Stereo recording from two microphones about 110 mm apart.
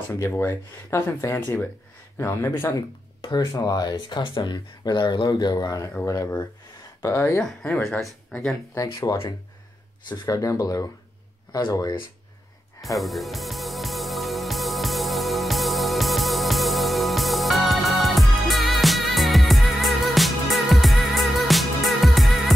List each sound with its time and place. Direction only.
0.1 s speech: 20° left (ahead or behind)
2.7 s speech: 40° left (ahead or behind)
7.4 s speech: 5° left (ahead or behind)
8.7 s speech: 30° left (ahead or behind)
10.2 s speech: 30° left (ahead or behind)
12.8 s music: centre (ahead or behind)